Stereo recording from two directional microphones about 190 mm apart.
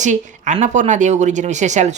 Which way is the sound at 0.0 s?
40° right (ahead or behind).